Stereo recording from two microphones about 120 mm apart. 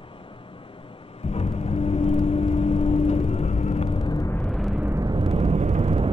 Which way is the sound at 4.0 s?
35° left (ahead or behind).